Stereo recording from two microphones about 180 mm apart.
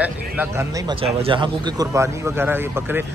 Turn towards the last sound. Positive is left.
turn(degrees=-10)  # may be behind; listen again after turning